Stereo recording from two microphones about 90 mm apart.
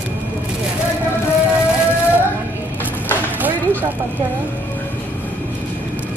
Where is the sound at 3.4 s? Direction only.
20° right (ahead or behind).